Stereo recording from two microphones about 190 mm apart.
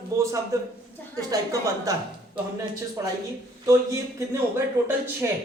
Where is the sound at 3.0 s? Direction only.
20° right (ahead or behind).